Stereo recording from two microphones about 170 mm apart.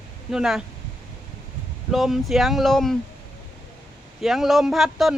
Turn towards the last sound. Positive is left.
turn(degrees=0)  # may be behind; listen again after turning